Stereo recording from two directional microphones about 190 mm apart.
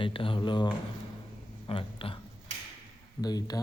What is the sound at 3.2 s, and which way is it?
Speech, 20° left (ahead or behind).